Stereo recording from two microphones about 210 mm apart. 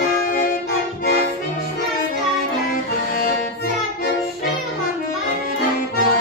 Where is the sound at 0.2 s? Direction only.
40° left (ahead or behind).